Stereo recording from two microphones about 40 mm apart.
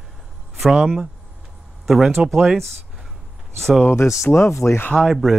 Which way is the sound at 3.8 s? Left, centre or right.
Left.